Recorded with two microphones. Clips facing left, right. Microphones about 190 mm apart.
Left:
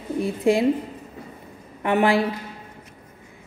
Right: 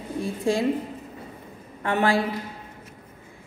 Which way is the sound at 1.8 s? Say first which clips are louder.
Left 3 dB; 15° left (ahead or behind).